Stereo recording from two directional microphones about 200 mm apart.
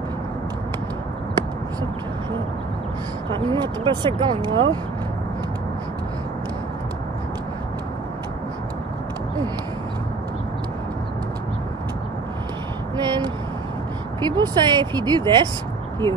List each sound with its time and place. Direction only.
3.3 s speech: 25° right (ahead or behind)
12.9 s vehicle: 20° right (ahead or behind)
14.2 s speech: 20° right (ahead or behind)